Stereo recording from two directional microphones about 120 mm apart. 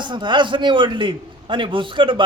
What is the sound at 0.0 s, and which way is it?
A man's voice, 40° right (ahead or behind).